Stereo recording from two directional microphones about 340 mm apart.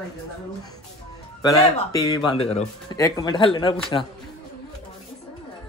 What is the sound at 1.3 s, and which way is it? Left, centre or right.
Speech, centre.